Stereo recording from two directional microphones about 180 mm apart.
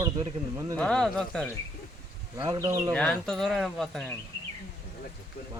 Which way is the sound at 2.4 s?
20° right (ahead or behind).